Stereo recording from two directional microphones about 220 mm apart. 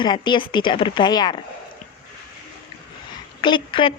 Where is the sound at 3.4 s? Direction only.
20° left (ahead or behind).